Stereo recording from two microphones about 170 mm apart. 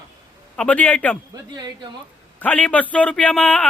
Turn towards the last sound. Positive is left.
turn(degrees=5)  # may be behind; listen again after turning